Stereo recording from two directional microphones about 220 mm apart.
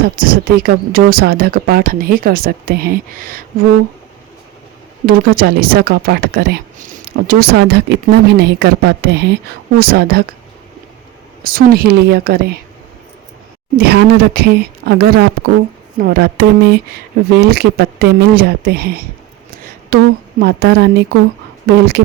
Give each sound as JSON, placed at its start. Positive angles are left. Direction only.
{"t": 0.2, "sound": "speech", "side_deg": -40}
{"t": 5.0, "sound": "speech", "side_deg": -45}
{"t": 11.4, "sound": "speech", "side_deg": -40}
{"t": 13.7, "sound": "speech", "side_deg": -45}
{"t": 19.5, "sound": "a sound", "side_deg": -40}
{"t": 20.4, "sound": "speech", "side_deg": -50}